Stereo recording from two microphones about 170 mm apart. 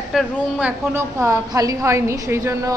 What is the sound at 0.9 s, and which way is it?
A woman's voice, 15° right (ahead or behind).